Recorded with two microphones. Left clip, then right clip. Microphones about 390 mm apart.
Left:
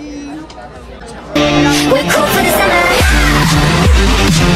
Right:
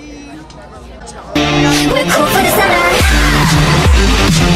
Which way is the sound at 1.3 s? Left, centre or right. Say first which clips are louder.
Left 1 dB; centre.